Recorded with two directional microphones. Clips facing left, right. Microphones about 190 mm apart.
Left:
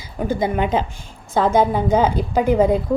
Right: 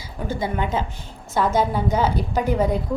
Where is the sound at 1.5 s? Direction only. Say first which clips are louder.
Left 6 dB; 55° left (ahead or behind).